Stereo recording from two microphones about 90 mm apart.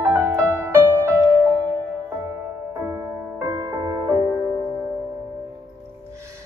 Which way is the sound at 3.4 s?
35° right (ahead or behind).